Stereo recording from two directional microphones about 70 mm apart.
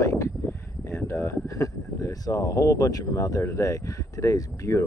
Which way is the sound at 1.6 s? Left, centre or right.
Left.